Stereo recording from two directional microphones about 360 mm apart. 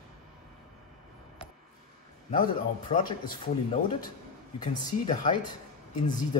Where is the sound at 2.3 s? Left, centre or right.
Left.